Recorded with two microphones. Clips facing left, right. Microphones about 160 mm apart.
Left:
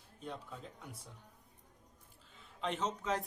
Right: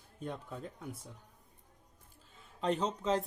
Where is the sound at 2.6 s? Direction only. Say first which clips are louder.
Right 5 dB; 35° right (ahead or behind).